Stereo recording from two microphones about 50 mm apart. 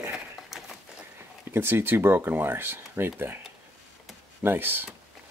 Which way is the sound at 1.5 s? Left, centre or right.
Right.